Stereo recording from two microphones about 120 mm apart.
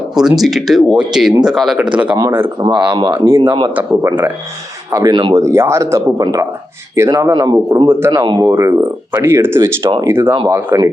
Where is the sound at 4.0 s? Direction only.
20° right (ahead or behind).